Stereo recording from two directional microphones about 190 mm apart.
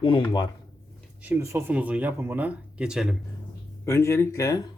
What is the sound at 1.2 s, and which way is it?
Speech, 10° right (ahead or behind).